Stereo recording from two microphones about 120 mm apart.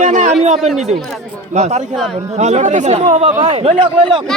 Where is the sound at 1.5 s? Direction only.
70° right (ahead or behind).